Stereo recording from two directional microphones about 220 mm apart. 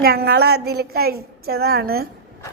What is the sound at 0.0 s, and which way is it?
A woman's voice, 45° right (ahead or behind).